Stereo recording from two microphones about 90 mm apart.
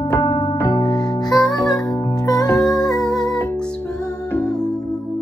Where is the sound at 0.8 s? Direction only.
45° left (ahead or behind).